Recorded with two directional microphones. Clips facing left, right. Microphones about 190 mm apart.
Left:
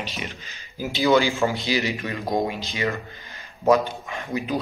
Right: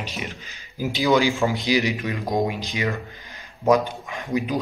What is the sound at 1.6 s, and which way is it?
Speech, 15° right (ahead or behind).